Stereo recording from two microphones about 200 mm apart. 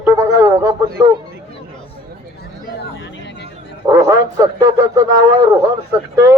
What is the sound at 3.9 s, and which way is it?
A man's voice, 15° right (ahead or behind).